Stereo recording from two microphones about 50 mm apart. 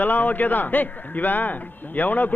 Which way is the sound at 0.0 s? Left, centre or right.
Left.